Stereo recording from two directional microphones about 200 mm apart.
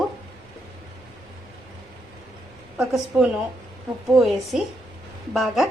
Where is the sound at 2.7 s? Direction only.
5° right (ahead or behind).